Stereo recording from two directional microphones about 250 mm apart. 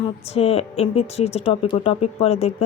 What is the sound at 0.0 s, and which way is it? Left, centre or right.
Speech, left.